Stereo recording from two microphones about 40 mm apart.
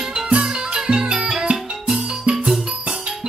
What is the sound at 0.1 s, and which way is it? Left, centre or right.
Music, right.